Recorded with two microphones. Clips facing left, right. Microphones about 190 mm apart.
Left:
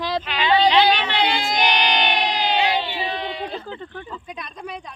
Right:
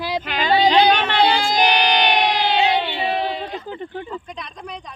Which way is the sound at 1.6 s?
65° right (ahead or behind).